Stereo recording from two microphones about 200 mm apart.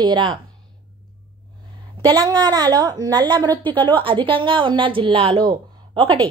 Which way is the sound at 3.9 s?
25° right (ahead or behind).